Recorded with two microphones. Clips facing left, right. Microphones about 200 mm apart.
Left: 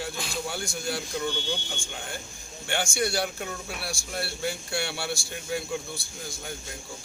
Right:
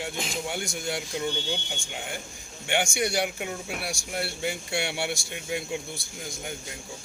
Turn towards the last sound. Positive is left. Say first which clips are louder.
# right 1 dB
turn(degrees=-20)  # may be behind; listen again after turning